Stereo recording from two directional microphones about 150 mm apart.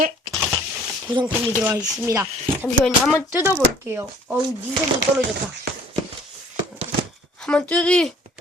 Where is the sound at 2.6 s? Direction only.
5° left (ahead or behind).